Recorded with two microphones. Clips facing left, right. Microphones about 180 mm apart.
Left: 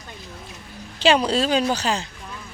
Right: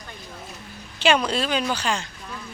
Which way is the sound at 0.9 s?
35° left (ahead or behind).